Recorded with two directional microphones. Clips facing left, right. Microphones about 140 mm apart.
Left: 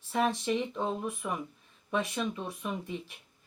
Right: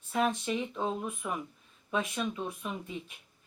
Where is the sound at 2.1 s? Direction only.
20° left (ahead or behind).